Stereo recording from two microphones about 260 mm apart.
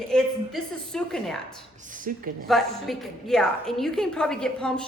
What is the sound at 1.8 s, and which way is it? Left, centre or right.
Speech, right.